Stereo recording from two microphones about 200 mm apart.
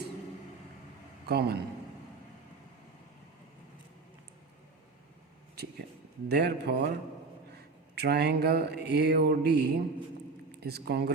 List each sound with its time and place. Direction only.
1.3 s speech: 55° right (ahead or behind)
6.2 s speech: 55° right (ahead or behind)
7.5 s mantra: 55° right (ahead or behind)
10.6 s speech: 55° right (ahead or behind)